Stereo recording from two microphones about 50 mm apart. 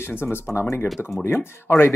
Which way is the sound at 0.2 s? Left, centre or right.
Left.